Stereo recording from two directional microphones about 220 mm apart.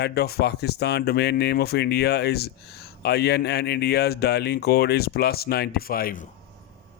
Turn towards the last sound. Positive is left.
turn(degrees=40)  # may be behind; listen again after turning